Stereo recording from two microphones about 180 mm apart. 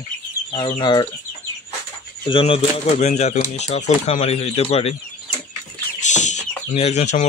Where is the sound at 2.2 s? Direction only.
30° left (ahead or behind).